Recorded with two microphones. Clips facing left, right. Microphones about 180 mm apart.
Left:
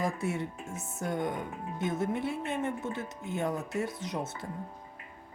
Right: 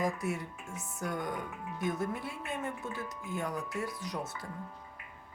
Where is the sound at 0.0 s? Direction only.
25° left (ahead or behind).